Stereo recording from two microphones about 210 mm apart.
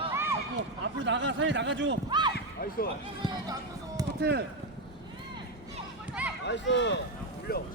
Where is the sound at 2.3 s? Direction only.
45° left (ahead or behind).